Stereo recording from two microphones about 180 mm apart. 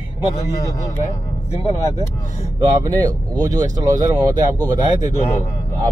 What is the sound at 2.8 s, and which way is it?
Speech, 20° right (ahead or behind).